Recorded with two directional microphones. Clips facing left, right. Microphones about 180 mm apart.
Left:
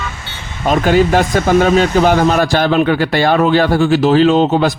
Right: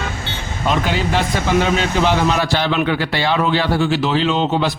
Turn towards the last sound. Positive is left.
turn(degrees=45)  # may be behind; listen again after turning